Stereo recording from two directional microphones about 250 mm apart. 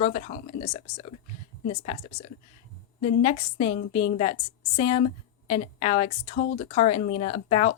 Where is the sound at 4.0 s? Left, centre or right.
Left.